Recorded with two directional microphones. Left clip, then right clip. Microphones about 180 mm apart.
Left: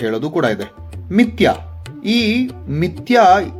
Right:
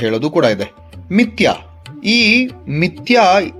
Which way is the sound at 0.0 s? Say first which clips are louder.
Right 4 dB; 35° right (ahead or behind).